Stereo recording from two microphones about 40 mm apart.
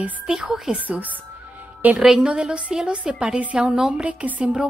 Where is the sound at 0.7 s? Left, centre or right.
Right.